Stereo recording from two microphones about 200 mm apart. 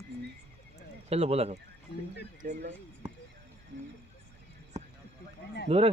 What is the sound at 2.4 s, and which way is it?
Speech, 50° right (ahead or behind).